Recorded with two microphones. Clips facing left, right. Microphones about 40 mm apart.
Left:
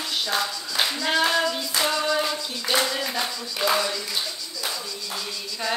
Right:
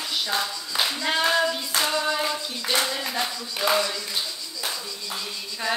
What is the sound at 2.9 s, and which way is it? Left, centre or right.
Clapping, centre.